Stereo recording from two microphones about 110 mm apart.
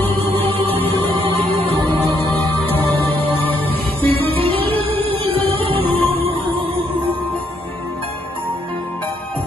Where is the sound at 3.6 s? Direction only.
15° left (ahead or behind).